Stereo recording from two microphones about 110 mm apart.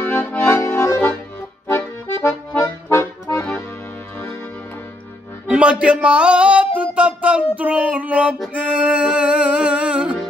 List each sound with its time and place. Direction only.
0.1 s accordion: 15° left (ahead or behind)
0.6 s accordion: 25° left (ahead or behind)
5.5 s a sound: 10° right (ahead or behind)
8.5 s music: 10° right (ahead or behind)